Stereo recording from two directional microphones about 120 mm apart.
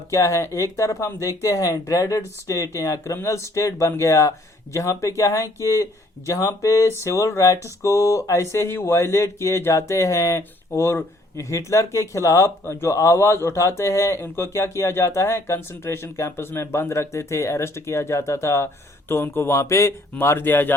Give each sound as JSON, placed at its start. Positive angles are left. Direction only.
{"t": 0.1, "sound": "speech", "side_deg": 25}